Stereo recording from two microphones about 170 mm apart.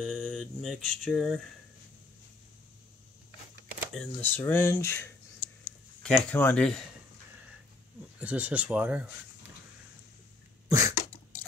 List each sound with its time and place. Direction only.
0.2 s speech: 5° left (ahead or behind)
3.9 s speech: 5° left (ahead or behind)
4.4 s speech: 15° left (ahead or behind)
8.2 s speech: 10° right (ahead or behind)
10.7 s cough: 20° right (ahead or behind)